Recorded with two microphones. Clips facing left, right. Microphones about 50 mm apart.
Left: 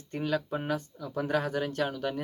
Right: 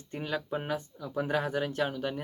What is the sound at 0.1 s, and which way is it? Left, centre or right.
Speech, centre.